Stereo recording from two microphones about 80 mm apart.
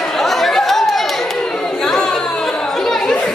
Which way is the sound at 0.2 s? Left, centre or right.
Centre.